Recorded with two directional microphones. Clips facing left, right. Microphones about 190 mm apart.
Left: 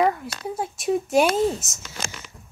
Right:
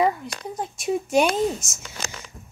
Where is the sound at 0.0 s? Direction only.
Centre (ahead or behind).